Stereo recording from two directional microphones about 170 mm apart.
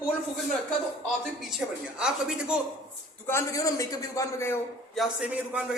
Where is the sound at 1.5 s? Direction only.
5° right (ahead or behind).